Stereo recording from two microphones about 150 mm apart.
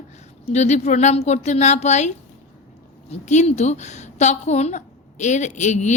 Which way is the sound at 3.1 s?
50° left (ahead or behind).